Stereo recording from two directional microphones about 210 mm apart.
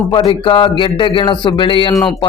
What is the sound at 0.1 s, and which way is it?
A man's voice, 20° left (ahead or behind).